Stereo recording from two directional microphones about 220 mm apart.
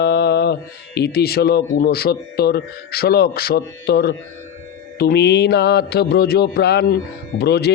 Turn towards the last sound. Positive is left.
turn(degrees=50)  # may be behind; listen again after turning